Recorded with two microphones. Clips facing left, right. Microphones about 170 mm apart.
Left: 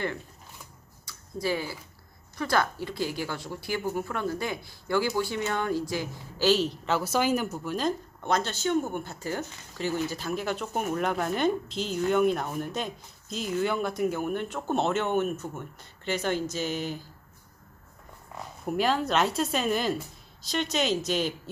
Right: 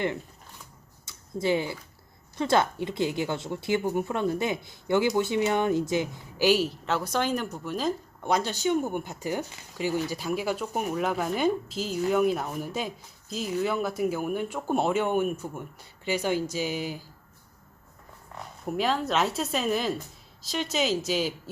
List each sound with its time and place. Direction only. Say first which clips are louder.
1.0 s a sound: right 3 dB; 25° right (ahead or behind)
2.4 s a woman's voice: right 3 dB; 25° right (ahead or behind)
18.3 s speech: left 1 dB; centre (ahead or behind)